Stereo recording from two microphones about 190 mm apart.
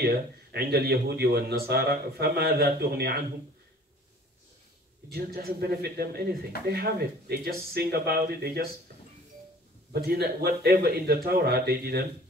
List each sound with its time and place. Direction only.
0.0 s speech: 55° right (ahead or behind)
5.1 s speech: 55° right (ahead or behind)
10.0 s speech: 55° right (ahead or behind)